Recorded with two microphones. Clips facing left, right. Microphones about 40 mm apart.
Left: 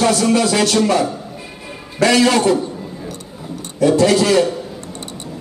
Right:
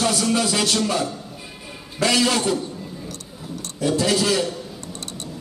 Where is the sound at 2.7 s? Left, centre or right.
Centre.